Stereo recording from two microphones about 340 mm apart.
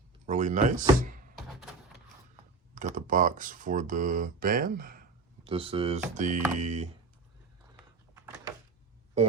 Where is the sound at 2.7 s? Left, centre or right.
Right.